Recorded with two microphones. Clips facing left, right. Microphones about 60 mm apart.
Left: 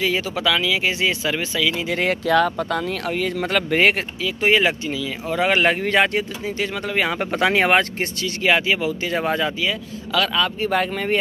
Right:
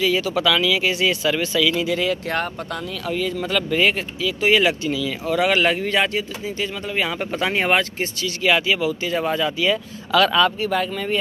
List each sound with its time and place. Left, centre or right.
0.0 s speech: left
0.3 s speech: centre
2.4 s speech: left
3.1 s speech: left
8.4 s speech: left
9.6 s speech: centre
10.7 s speech: left